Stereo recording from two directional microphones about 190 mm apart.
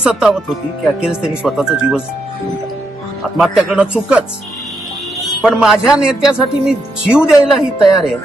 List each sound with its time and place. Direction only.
0.0 s a man's voice: 5° right (ahead or behind)
3.3 s a man's voice: 5° right (ahead or behind)
5.2 s a man's voice: centre (ahead or behind)